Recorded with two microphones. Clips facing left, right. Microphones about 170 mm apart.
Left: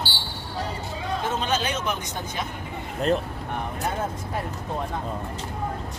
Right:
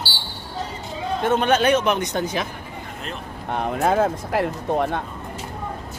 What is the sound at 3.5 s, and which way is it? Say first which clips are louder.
Speech: right 9 dB; 70° right (ahead or behind).